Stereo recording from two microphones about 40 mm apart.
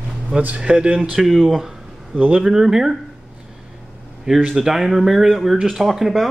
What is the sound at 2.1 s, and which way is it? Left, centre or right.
Speech, right.